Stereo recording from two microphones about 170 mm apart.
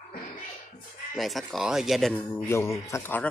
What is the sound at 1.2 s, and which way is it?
Speech, centre (ahead or behind).